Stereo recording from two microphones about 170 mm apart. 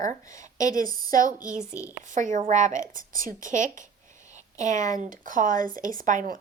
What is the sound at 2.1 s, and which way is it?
Speech, 50° right (ahead or behind).